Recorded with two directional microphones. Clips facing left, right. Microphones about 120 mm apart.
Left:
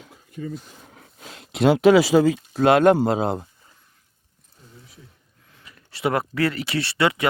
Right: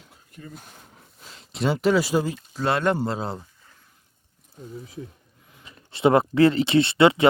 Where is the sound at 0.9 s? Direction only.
70° left (ahead or behind); by 2.3 s 90° left.